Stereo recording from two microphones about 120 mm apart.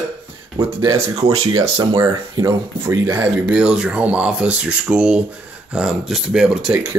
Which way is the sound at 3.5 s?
5° right (ahead or behind).